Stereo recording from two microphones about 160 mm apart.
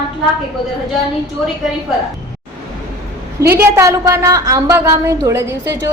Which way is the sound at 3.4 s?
15° right (ahead or behind).